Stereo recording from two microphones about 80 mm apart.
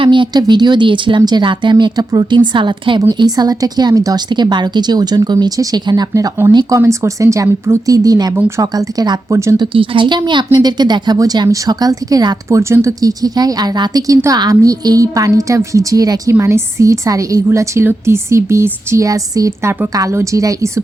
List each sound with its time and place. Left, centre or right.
0.0 s speech: right
1.8 s a woman's voice: right
3.1 s speech: right
4.3 s speech: right
6.7 s a woman's voice: right
9.3 s a woman's voice: right
9.6 s speech: right
11.4 s a woman's voice: right
12.5 s a woman's voice: right
14.5 s a woman's voice: right
16.4 s a woman's voice: right
19.0 s a woman's voice: right